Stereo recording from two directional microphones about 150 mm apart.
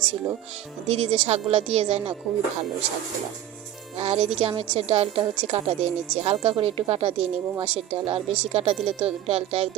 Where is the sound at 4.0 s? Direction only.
40° right (ahead or behind).